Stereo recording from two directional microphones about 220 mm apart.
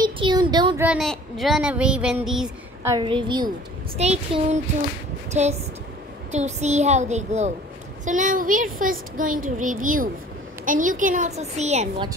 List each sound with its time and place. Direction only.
0.0 s a sound: 20° right (ahead or behind)
0.8 s speech: centre (ahead or behind)
2.8 s a woman's voice: 15° right (ahead or behind)